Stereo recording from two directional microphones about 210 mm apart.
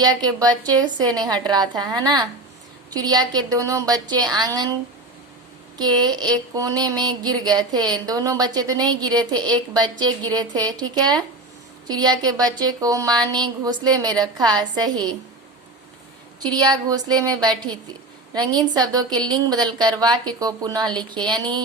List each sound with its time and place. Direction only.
0.0 s a woman's voice: 20° right (ahead or behind)
5.7 s speech: 20° right (ahead or behind)
16.4 s speech: 20° right (ahead or behind)